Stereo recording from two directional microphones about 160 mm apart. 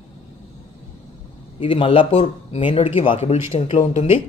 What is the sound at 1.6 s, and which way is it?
A man's voice, 35° left (ahead or behind).